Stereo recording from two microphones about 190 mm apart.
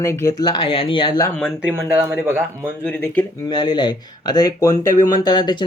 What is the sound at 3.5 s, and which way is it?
Speech, 25° left (ahead or behind).